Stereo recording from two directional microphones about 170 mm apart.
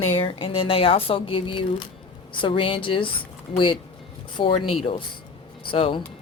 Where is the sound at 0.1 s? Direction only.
35° left (ahead or behind).